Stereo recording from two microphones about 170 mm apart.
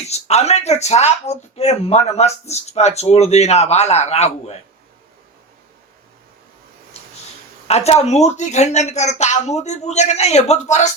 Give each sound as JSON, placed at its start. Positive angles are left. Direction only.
{"t": 0.0, "sound": "speech", "side_deg": 40}
{"t": 7.7, "sound": "speech", "side_deg": 40}